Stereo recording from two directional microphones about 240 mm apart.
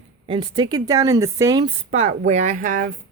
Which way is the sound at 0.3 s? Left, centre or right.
Centre.